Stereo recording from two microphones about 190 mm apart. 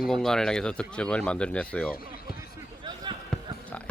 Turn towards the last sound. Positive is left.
turn(degrees=5)  # may be behind; listen again after turning